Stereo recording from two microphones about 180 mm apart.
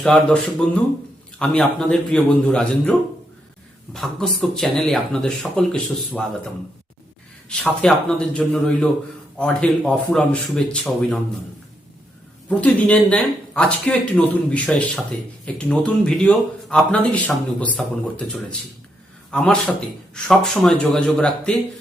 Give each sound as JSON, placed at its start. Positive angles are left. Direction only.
{"t": 0.0, "sound": "speech", "side_deg": 5}
{"t": 3.9, "sound": "speech", "side_deg": 0}
{"t": 7.5, "sound": "speech", "side_deg": 5}
{"t": 12.5, "sound": "speech", "side_deg": 5}